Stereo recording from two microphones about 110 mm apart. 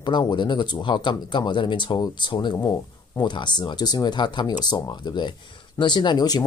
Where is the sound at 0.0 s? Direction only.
45° left (ahead or behind).